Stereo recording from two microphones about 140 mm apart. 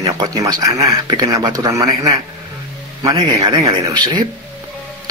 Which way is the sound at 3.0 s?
30° right (ahead or behind).